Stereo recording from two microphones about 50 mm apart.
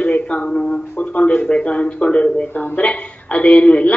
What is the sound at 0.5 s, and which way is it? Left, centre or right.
A woman's voice, centre.